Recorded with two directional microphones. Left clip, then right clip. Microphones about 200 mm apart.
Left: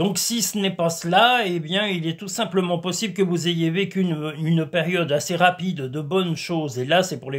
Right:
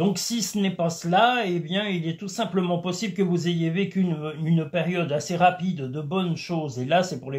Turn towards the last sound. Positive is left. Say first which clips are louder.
# left 3 dB
turn(degrees=50)  # may be behind; listen again after turning